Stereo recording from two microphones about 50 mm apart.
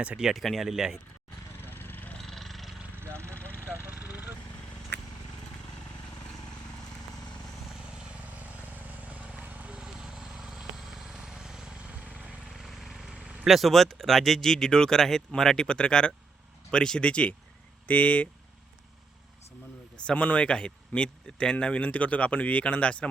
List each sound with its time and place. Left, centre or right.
0.0 s speech: right
0.3 s speech: centre
1.6 s a sound: left
2.1 s vehicle: centre
3.0 s a sound: right
3.3 s a sound: left
3.8 s a sound: right
8.4 s vehicle: right
9.7 s vehicle: centre
11.9 s vehicle: right
12.5 s vehicle: centre
13.4 s speech: centre; by 18.3 s left
20.1 s speech: left